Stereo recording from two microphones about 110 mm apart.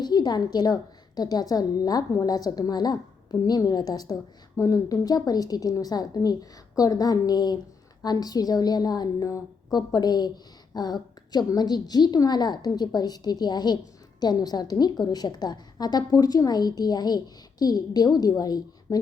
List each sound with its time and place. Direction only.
0.0 s a woman's voice: 40° left (ahead or behind)